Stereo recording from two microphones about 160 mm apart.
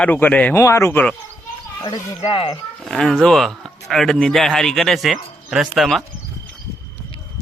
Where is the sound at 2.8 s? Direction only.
5° left (ahead or behind).